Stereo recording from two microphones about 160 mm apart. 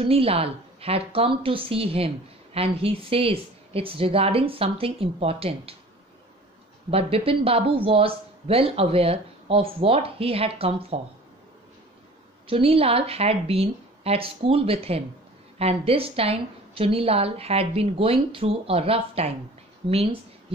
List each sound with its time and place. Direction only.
0.0 s a woman's voice: 35° right (ahead or behind)
6.9 s a woman's voice: 35° right (ahead or behind)
12.4 s a woman's voice: 35° right (ahead or behind)